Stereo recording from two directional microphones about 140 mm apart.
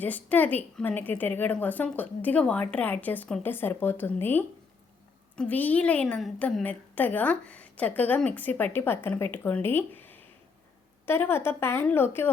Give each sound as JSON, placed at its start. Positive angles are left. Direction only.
{"t": 0.0, "sound": "a woman's voice", "side_deg": 10}